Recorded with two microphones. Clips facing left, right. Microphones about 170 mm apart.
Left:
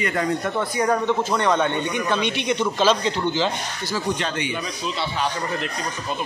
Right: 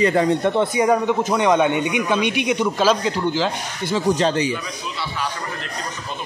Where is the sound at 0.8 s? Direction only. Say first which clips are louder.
Right 3 dB; 10° right (ahead or behind).